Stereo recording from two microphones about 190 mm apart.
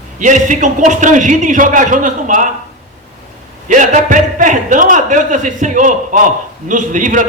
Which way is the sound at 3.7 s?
40° right (ahead or behind).